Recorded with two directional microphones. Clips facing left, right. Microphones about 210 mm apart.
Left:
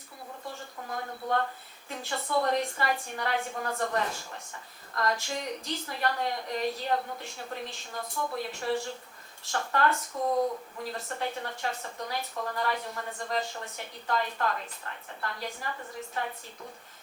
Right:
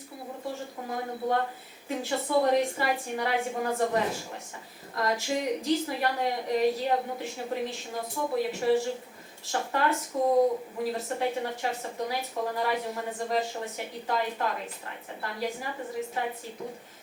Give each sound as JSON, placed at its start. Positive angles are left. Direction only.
{"t": 0.4, "sound": "a woman's voice", "side_deg": -5}
{"t": 10.3, "sound": "speech", "side_deg": -25}
{"t": 10.8, "sound": "a woman's voice", "side_deg": -5}